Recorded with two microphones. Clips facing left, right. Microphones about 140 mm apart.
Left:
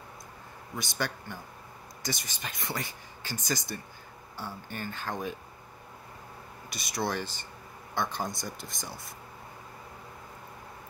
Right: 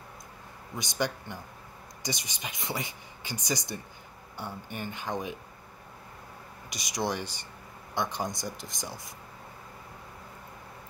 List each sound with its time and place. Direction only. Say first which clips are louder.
0.7 s speech: right 3 dB; 20° right (ahead or behind)
6.7 s speech: right 1 dB; 15° right (ahead or behind)